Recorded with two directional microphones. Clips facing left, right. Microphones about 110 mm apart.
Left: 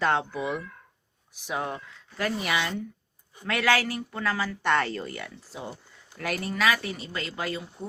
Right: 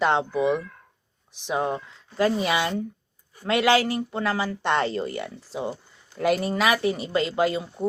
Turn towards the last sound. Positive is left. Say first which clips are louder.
# right 9 dB
turn(degrees=-25)  # may be behind; listen again after turning